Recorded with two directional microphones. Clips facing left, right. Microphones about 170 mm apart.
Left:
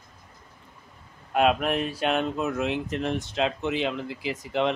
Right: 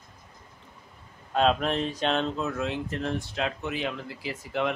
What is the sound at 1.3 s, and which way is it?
Speech, 10° left (ahead or behind).